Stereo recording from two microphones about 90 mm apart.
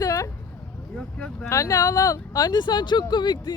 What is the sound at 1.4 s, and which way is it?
Speech, 35° left (ahead or behind).